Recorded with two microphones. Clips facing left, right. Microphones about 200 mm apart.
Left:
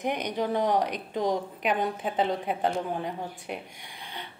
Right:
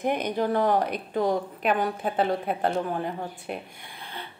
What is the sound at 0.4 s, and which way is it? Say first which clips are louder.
Speech: right 2 dB; 55° right (ahead or behind).